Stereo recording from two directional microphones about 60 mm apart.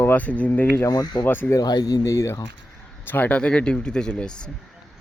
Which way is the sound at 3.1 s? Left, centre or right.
Left.